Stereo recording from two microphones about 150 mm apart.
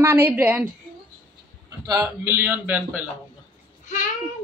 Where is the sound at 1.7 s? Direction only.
20° right (ahead or behind).